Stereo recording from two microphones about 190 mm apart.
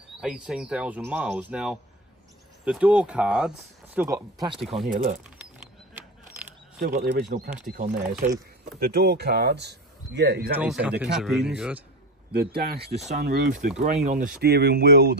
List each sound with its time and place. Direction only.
0.2 s speech: 5° right (ahead or behind)
7.1 s speech: 60° right (ahead or behind)
7.6 s speech: 45° right (ahead or behind)
10.6 s speech: 5° right (ahead or behind)
12.3 s speech: 55° right (ahead or behind)
14.4 s speech: 60° right (ahead or behind)